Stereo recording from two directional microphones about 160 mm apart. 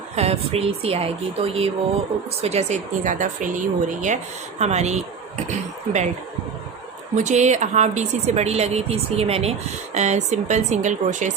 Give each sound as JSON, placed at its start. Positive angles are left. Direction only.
{"t": 0.2, "sound": "speech", "side_deg": -40}
{"t": 7.2, "sound": "speech", "side_deg": -45}